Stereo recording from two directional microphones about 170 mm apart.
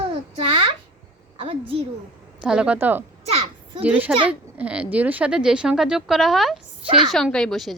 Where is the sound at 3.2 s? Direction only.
35° right (ahead or behind).